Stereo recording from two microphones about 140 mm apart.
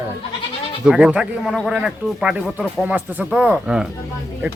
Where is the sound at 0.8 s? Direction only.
5° right (ahead or behind).